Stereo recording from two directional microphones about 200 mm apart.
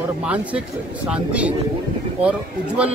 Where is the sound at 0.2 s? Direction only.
5° right (ahead or behind).